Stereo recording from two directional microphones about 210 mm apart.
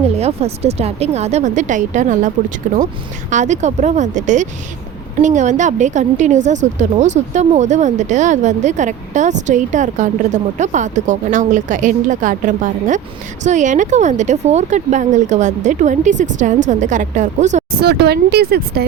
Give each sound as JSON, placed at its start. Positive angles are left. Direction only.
{"t": 0.2, "sound": "a woman's voice", "side_deg": -30}
{"t": 17.7, "sound": "speech", "side_deg": -50}